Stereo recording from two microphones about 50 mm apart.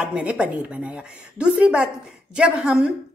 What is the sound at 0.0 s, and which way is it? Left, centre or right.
A woman's voice, right.